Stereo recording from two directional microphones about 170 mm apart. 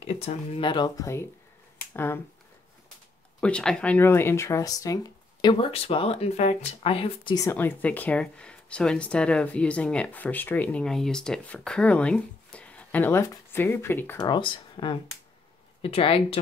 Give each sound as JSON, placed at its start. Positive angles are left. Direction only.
{"t": 0.0, "sound": "speech", "side_deg": 40}
{"t": 3.3, "sound": "speech", "side_deg": 5}
{"t": 7.3, "sound": "speech", "side_deg": 15}